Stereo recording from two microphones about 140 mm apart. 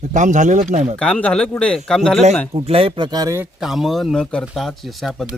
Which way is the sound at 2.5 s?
40° right (ahead or behind).